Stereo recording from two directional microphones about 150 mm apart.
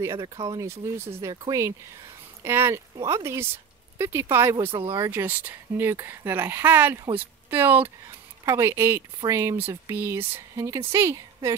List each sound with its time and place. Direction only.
0.0 s speech: 20° right (ahead or behind)
0.4 s speech: 30° right (ahead or behind)
0.7 s speech: 15° right (ahead or behind)
4.6 s speech: 40° right (ahead or behind)
4.9 s speech: 25° right (ahead or behind)
5.2 s speech: 10° right (ahead or behind)